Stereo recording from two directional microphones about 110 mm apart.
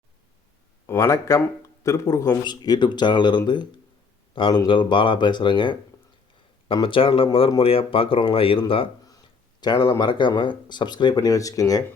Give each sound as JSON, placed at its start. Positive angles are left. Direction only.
{"t": 0.9, "sound": "speech", "side_deg": 25}
{"t": 2.4, "sound": "speech", "side_deg": 40}
{"t": 6.8, "sound": "speech", "side_deg": 55}
{"t": 9.0, "sound": "speech", "side_deg": 35}